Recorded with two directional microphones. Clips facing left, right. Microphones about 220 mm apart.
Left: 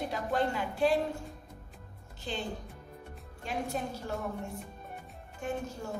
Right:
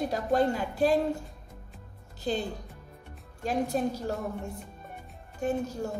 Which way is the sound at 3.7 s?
40° right (ahead or behind).